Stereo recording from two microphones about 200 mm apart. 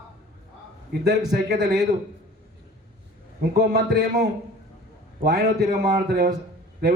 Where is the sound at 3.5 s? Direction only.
50° right (ahead or behind).